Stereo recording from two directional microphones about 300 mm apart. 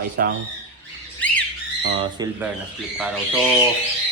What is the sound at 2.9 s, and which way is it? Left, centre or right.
Speech, centre.